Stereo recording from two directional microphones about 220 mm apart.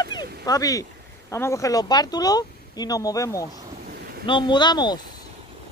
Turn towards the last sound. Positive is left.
turn(degrees=20)  # may be behind; listen again after turning